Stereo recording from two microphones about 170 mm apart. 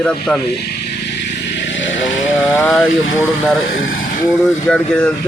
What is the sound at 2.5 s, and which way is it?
Speech, 15° left (ahead or behind).